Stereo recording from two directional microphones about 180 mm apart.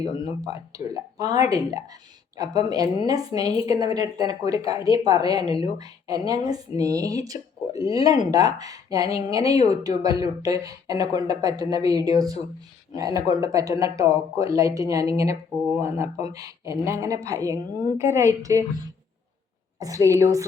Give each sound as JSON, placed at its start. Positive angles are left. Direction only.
{"t": 0.0, "sound": "speech", "side_deg": -20}
{"t": 19.8, "sound": "speech", "side_deg": -20}